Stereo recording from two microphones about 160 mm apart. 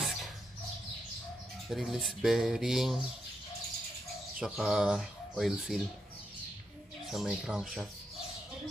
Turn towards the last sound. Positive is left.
turn(degrees=0)  # may be behind; listen again after turning